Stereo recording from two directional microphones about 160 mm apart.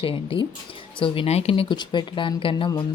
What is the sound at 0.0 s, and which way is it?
Speech, 35° left (ahead or behind).